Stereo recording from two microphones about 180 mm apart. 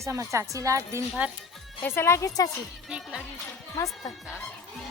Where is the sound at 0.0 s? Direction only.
15° right (ahead or behind).